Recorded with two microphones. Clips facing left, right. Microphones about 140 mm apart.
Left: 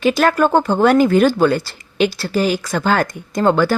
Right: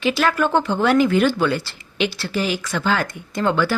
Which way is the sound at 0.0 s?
45° left (ahead or behind).